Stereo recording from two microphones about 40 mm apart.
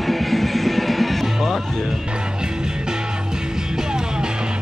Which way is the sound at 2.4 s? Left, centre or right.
Centre.